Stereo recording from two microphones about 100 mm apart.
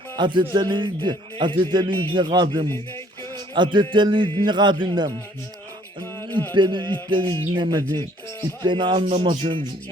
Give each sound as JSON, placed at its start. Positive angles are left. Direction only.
{"t": 0.2, "sound": "a man's voice", "side_deg": -50}
{"t": 3.3, "sound": "music", "side_deg": -50}
{"t": 4.4, "sound": "a man's voice", "side_deg": -50}
{"t": 6.2, "sound": "music", "side_deg": 20}
{"t": 6.5, "sound": "a man's voice", "side_deg": -50}
{"t": 7.9, "sound": "speech", "side_deg": 20}
{"t": 8.6, "sound": "a man's voice", "side_deg": -50}